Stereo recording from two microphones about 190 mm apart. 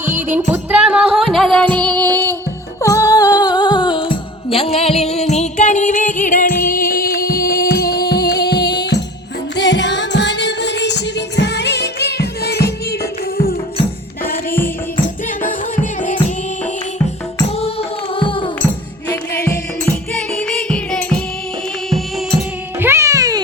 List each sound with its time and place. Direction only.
0.5 s music: 5° right (ahead or behind); by 13.6 s 55° left (ahead or behind)
15.4 s music: 45° left (ahead or behind)
17.6 s music: 30° left (ahead or behind)
20.1 s music: 5° left (ahead or behind)
22.8 s music: 15° right (ahead or behind)